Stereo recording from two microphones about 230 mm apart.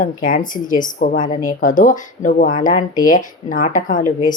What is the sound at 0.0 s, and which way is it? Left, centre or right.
A woman's voice, left.